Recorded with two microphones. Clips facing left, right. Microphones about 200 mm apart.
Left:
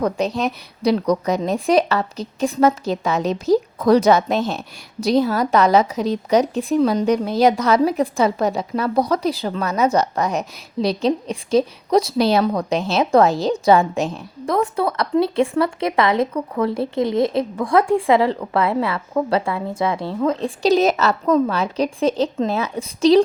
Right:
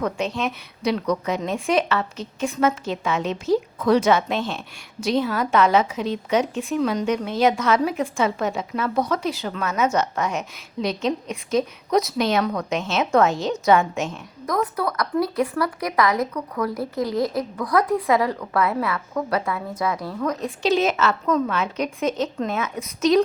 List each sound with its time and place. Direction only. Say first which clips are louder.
0.0 s a woman's voice: left 4 dB; 35° left (ahead or behind)